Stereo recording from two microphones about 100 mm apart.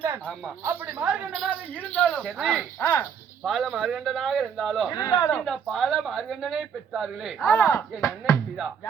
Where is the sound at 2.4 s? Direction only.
5° right (ahead or behind).